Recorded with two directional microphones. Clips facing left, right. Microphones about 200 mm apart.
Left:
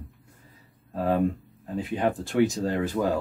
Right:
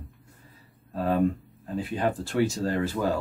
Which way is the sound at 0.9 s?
20° left (ahead or behind).